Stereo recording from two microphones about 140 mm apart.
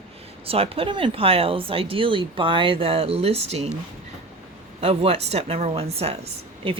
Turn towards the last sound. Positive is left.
turn(degrees=-45)  # may be behind; listen again after turning